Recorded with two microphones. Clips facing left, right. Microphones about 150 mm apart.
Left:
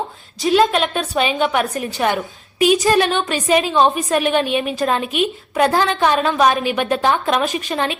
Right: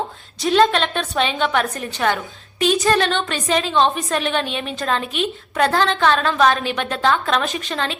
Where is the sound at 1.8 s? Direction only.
15° left (ahead or behind).